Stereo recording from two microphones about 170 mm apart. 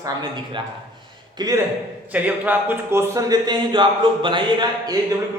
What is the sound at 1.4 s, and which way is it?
Speech, 25° right (ahead or behind).